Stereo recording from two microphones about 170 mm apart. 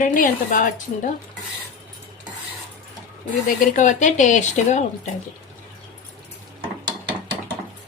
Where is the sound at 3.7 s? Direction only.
45° left (ahead or behind).